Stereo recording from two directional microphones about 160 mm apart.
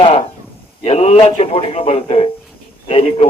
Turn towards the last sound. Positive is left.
turn(degrees=40)  # may be behind; listen again after turning